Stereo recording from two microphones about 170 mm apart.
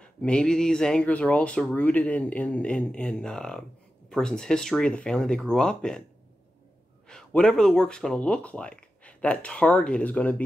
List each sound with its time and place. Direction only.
0.0 s speech: 5° left (ahead or behind)
7.1 s speech: 5° left (ahead or behind)